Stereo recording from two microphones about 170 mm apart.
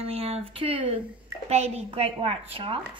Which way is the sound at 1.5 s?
40° right (ahead or behind).